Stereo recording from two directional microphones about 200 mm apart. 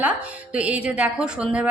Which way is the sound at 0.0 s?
5° right (ahead or behind).